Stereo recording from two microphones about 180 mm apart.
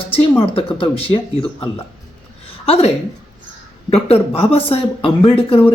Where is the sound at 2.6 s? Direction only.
35° left (ahead or behind).